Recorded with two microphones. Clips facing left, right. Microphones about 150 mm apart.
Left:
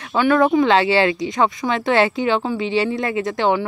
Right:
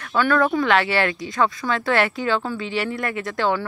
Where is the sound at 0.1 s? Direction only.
15° left (ahead or behind).